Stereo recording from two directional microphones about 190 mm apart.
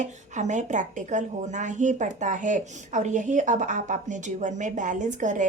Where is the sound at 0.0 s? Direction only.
40° right (ahead or behind).